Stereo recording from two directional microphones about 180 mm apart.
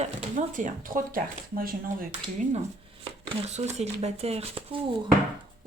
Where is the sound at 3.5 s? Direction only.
35° right (ahead or behind).